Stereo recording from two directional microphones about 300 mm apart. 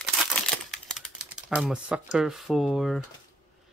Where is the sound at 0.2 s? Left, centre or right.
Centre.